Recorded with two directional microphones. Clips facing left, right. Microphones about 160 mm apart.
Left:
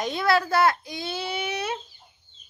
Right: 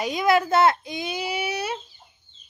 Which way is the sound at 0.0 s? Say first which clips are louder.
Right 2 dB; 15° right (ahead or behind).